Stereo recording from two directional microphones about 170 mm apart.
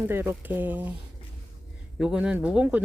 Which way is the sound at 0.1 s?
15° right (ahead or behind).